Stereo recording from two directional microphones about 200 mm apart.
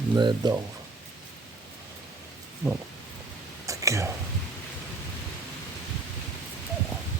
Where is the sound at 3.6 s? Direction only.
15° right (ahead or behind).